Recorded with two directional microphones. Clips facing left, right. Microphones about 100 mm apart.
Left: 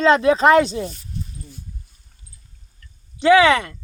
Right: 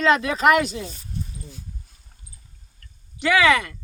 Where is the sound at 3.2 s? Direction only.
25° left (ahead or behind).